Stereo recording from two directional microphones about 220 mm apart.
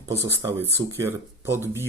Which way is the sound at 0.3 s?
10° right (ahead or behind).